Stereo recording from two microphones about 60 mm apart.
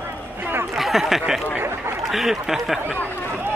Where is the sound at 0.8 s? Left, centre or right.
Centre.